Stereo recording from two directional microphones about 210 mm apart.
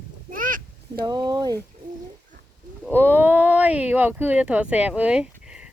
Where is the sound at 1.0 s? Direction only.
20° right (ahead or behind).